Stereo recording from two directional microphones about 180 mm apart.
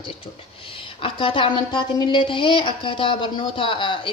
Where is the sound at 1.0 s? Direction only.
30° left (ahead or behind).